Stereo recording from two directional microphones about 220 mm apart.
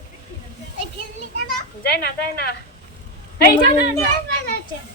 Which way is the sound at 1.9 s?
45° left (ahead or behind).